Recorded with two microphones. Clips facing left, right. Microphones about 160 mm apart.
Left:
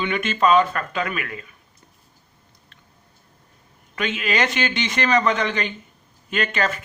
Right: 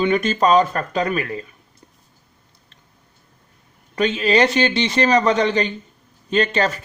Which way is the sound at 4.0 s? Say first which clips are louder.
Right 7 dB; 35° right (ahead or behind).